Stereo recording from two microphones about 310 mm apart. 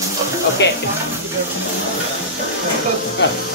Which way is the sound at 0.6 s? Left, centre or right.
Left.